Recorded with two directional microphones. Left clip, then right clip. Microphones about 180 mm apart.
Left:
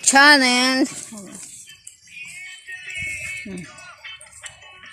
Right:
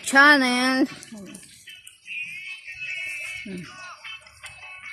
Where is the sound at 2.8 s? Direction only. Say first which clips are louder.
Left 2 dB; 25° left (ahead or behind).